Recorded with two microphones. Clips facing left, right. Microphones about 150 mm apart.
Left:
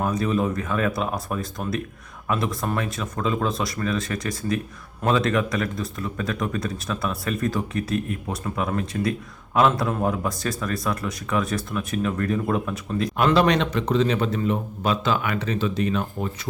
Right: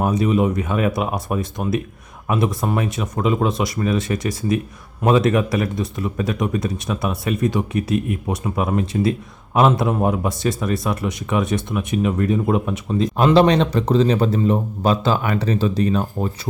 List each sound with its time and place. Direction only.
0.2 s a man's voice: 15° right (ahead or behind); by 16.3 s 35° right (ahead or behind)